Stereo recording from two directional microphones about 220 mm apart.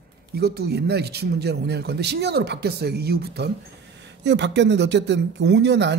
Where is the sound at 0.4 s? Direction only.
45° right (ahead or behind).